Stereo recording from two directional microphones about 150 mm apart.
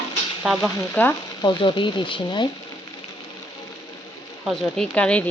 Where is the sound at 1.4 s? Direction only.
30° left (ahead or behind).